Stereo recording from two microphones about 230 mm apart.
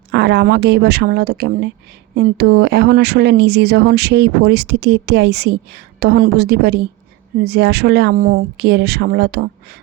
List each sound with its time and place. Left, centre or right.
0.1 s speech: right